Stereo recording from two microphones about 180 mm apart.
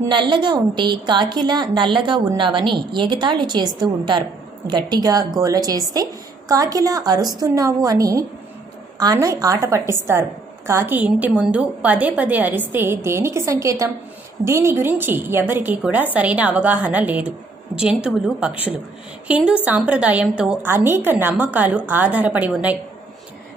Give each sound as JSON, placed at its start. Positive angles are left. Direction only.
{"t": 0.1, "sound": "a woman's voice", "side_deg": -25}